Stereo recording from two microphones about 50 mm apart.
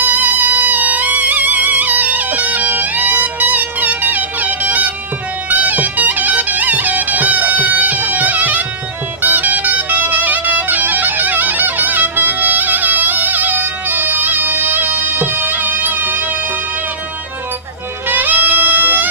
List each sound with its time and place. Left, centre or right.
0.0 s music: right
18.1 s music: right